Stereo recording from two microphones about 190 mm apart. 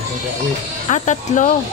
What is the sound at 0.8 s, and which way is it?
Speech, 40° left (ahead or behind).